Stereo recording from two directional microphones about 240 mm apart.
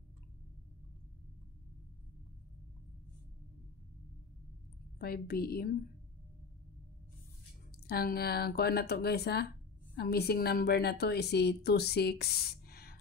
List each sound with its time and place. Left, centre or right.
4.9 s a woman's voice: left
7.8 s a woman's voice: left